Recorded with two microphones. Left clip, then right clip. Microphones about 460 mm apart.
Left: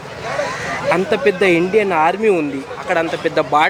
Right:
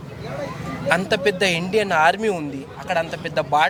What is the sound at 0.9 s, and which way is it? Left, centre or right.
A man's voice, right.